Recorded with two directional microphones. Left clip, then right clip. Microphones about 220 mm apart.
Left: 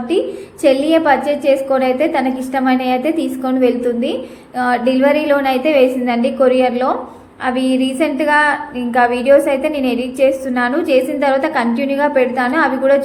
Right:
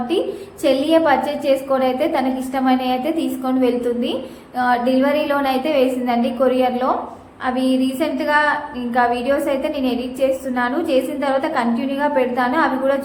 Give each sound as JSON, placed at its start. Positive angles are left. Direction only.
{"t": 0.6, "sound": "a woman's voice", "side_deg": 15}
{"t": 7.4, "sound": "a sound", "side_deg": 20}
{"t": 9.0, "sound": "a woman's voice", "side_deg": 20}